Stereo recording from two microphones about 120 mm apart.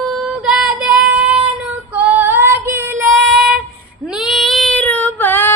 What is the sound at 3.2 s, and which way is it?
Child singing, centre (ahead or behind).